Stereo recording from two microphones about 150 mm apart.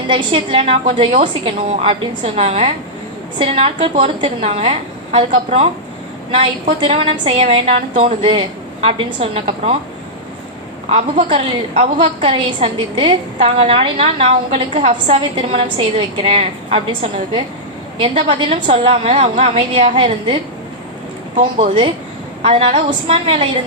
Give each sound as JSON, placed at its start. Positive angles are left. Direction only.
{"t": 0.1, "sound": "a woman's voice", "side_deg": -35}
{"t": 10.8, "sound": "a woman's voice", "side_deg": -45}
{"t": 21.6, "sound": "a woman's voice", "side_deg": -35}